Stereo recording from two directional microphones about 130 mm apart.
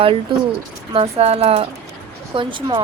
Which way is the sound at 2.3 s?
40° right (ahead or behind).